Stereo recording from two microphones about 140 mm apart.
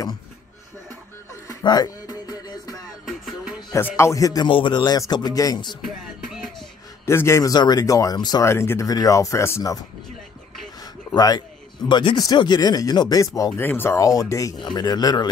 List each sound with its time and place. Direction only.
1.5 s music: 30° left (ahead or behind)
3.1 s music: 5° right (ahead or behind)
3.7 s speech: 20° left (ahead or behind)
4.5 s a man's voice: 35° left (ahead or behind)
5.9 s music: centre (ahead or behind)
7.1 s speech: 20° left (ahead or behind)
11.1 s speech: 30° left (ahead or behind)